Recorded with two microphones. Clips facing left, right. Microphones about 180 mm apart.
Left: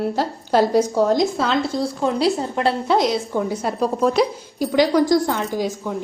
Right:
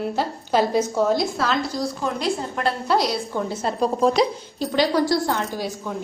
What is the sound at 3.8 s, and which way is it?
A woman's voice, 5° left (ahead or behind).